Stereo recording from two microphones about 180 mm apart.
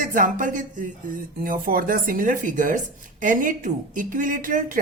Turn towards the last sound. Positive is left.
turn(degrees=-50)  # may be behind; listen again after turning